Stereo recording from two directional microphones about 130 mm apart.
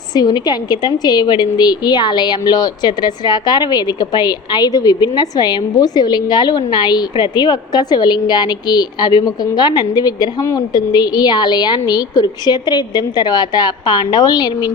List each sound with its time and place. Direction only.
0.1 s a woman's voice: 30° left (ahead or behind)